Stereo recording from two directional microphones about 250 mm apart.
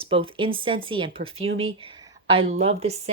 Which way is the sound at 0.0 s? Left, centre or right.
Right.